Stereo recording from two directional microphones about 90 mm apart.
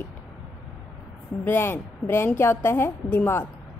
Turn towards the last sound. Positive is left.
turn(degrees=25)  # may be behind; listen again after turning